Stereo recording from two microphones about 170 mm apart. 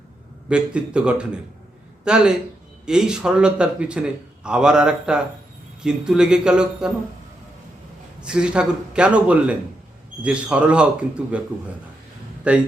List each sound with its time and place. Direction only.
0.4 s a man's voice: 5° right (ahead or behind)
8.2 s a man's voice: 5° right (ahead or behind)